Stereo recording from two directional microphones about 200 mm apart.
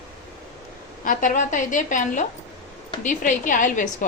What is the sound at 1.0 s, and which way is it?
A woman's voice, 40° left (ahead or behind).